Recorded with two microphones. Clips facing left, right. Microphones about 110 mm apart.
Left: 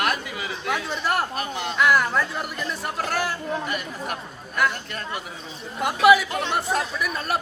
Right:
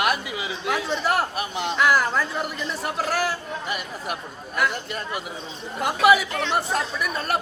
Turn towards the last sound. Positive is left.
turn(degrees=0)  # may be behind; listen again after turning